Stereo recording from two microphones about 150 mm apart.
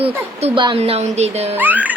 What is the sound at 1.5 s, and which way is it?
Speech, 10° right (ahead or behind).